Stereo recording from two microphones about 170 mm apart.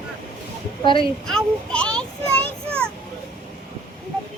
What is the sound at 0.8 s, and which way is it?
Speech, 30° left (ahead or behind).